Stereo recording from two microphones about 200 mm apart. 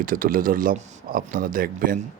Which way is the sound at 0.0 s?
45° right (ahead or behind).